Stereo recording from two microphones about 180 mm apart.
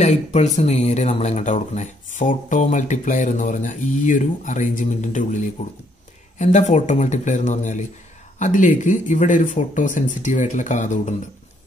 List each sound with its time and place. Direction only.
0.0 s speech: 40° left (ahead or behind)